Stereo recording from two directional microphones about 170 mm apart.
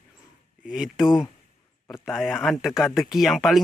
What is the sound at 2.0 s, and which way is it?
Speech, centre (ahead or behind).